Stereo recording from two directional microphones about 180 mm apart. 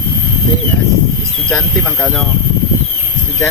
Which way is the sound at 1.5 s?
5° left (ahead or behind).